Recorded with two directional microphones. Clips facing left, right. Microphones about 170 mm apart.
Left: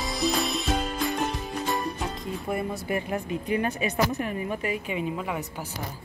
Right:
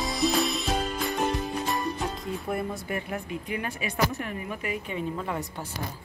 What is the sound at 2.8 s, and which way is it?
A woman's voice, 25° left (ahead or behind).